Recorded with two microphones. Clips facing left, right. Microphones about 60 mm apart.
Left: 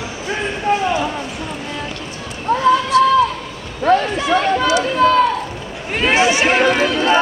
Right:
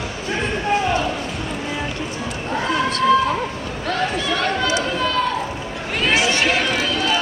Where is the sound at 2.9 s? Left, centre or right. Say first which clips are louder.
Left 9 dB; right.